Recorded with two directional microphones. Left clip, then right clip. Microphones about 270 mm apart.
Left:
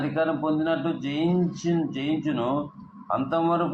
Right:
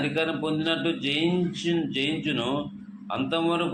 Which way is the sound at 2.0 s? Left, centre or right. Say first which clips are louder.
Even; right.